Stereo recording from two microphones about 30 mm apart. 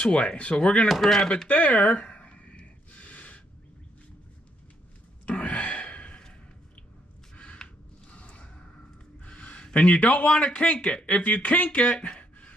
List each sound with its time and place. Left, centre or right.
0.0 s speech: left
0.8 s speech: centre
1.5 s a sound: left
5.2 s sigh: left
7.6 s a sound: left
9.8 s speech: left
10.2 s speech: left